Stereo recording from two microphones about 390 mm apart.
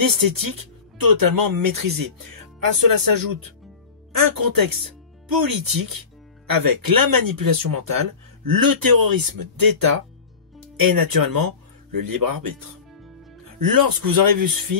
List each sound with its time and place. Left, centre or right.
0.0 s speech: right
13.6 s speech: right